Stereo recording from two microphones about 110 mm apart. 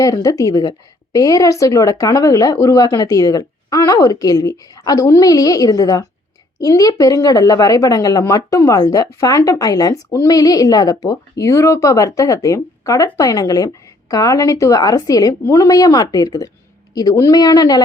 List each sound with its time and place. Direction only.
0.0 s a woman's voice: 30° left (ahead or behind)